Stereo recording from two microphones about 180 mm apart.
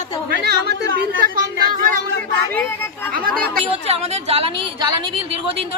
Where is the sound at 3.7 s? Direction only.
35° right (ahead or behind).